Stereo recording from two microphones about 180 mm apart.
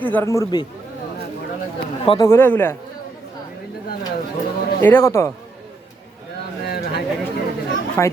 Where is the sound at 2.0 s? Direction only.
20° left (ahead or behind).